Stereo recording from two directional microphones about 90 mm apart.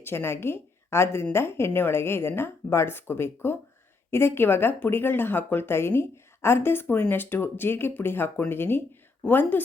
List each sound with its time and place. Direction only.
0.0 s speech: 25° left (ahead or behind)